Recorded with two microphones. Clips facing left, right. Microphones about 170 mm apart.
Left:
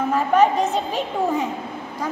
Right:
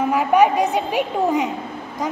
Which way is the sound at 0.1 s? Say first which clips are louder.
Right 1 dB; 10° right (ahead or behind).